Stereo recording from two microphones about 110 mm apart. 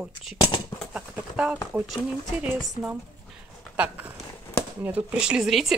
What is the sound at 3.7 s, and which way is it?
Speech, 15° right (ahead or behind).